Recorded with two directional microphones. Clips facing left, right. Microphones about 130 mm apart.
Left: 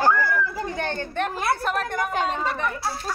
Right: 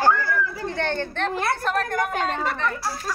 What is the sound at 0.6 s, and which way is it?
A woman's voice, 15° left (ahead or behind).